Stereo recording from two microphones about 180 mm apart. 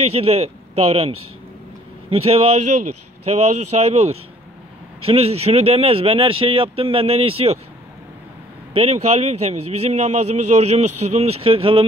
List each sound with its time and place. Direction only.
0.0 s a man's voice: 35° right (ahead or behind)
8.7 s a man's voice: 35° right (ahead or behind)